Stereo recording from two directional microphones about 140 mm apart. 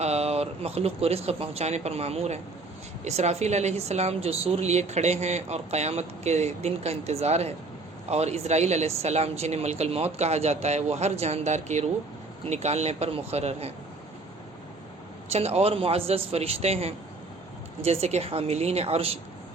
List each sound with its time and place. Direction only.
0.0 s a woman's voice: 50° right (ahead or behind)
15.3 s a woman's voice: 50° right (ahead or behind)